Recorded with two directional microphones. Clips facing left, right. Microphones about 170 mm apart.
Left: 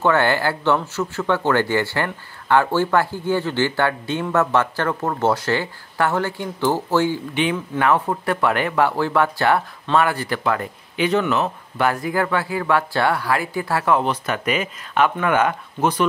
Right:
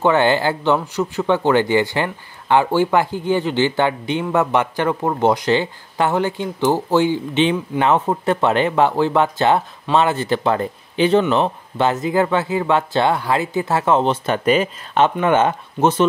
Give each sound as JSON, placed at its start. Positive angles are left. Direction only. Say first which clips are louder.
{"t": 0.0, "sound": "speech", "louder": "right 3 dB", "side_deg": -20}